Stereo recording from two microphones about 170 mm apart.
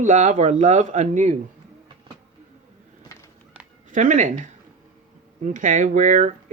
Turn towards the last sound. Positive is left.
turn(degrees=-45)  # may be behind; listen again after turning